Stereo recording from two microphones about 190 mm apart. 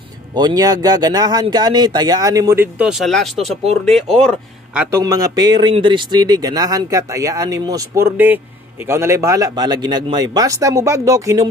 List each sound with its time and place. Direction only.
0.3 s speech: 20° right (ahead or behind); by 4.8 s centre (ahead or behind)
4.9 s speech: 20° right (ahead or behind)